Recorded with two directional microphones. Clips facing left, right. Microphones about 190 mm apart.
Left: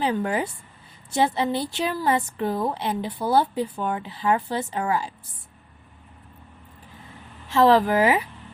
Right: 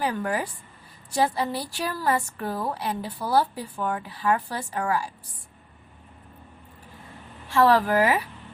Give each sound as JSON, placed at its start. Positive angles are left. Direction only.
{"t": 0.0, "sound": "a woman's voice", "side_deg": 25}
{"t": 7.4, "sound": "a woman's voice", "side_deg": 20}